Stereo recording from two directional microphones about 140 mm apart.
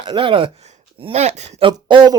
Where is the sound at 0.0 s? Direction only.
35° right (ahead or behind).